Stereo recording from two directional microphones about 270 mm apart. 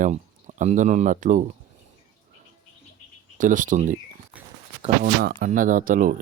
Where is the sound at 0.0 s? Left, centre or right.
Right.